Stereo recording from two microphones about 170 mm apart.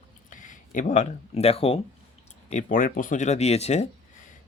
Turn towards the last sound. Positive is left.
turn(degrees=40)  # may be behind; listen again after turning